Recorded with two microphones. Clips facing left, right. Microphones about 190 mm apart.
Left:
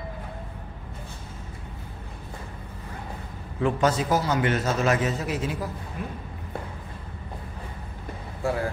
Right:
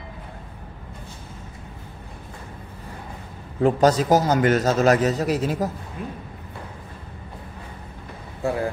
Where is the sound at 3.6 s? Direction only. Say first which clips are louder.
Right 6 dB; 40° right (ahead or behind).